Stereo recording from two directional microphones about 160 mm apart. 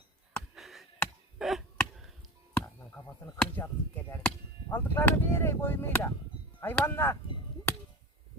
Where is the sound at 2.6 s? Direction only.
15° left (ahead or behind).